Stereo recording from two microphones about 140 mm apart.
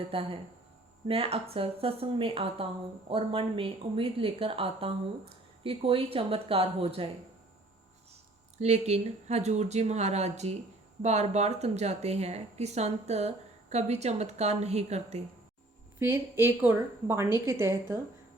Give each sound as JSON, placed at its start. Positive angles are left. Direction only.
{"t": 0.1, "sound": "speech", "side_deg": -40}
{"t": 8.5, "sound": "speech", "side_deg": -50}
{"t": 16.0, "sound": "a woman's voice", "side_deg": -15}